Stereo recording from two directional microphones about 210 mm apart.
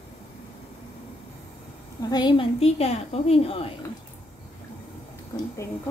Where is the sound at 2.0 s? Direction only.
20° left (ahead or behind).